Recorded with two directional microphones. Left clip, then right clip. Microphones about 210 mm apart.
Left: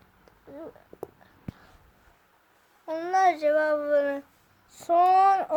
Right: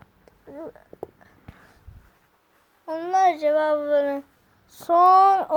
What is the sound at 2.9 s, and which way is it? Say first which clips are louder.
A child's voice: right 3 dB; 10° right (ahead or behind).